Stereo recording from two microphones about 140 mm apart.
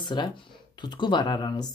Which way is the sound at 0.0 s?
35° left (ahead or behind).